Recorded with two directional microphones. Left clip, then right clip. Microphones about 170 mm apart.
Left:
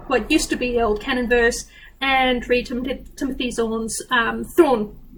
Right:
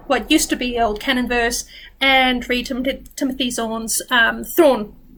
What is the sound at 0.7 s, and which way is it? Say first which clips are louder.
Speech: right 2 dB; 15° right (ahead or behind).